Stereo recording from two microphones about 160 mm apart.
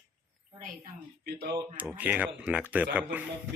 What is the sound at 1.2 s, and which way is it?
Speech, 90° right.